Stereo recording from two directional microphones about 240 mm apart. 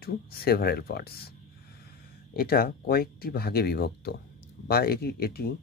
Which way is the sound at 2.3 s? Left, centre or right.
Left.